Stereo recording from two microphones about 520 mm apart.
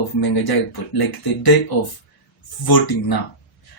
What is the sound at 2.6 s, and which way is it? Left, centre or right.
Speech, left.